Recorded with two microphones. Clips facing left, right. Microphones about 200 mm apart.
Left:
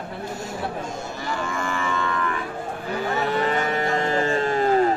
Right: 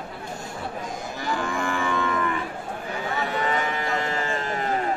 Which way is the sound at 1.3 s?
15° right (ahead or behind).